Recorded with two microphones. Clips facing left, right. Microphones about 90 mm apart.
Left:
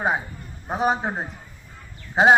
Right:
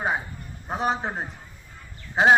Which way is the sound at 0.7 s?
5° left (ahead or behind).